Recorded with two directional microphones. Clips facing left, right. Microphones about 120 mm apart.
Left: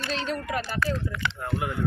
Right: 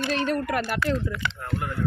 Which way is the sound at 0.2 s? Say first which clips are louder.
Right 4 dB; 55° right (ahead or behind).